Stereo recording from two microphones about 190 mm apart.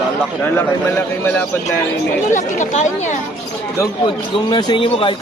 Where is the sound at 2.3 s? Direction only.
40° left (ahead or behind).